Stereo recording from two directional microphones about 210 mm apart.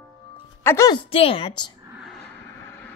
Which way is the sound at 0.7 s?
15° left (ahead or behind).